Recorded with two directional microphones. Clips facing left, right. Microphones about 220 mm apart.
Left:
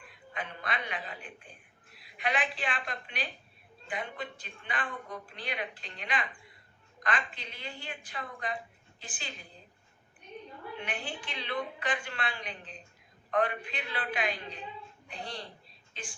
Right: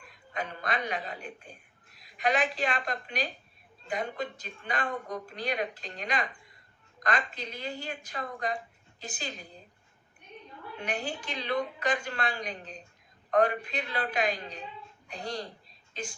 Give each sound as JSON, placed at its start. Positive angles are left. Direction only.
{"t": 0.1, "sound": "a woman's voice", "side_deg": -40}
{"t": 10.8, "sound": "a woman's voice", "side_deg": -40}